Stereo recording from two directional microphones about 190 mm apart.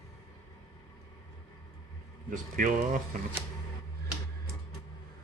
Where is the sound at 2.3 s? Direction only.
45° right (ahead or behind).